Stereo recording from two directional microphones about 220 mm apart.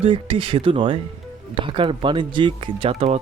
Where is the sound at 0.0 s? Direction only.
25° right (ahead or behind).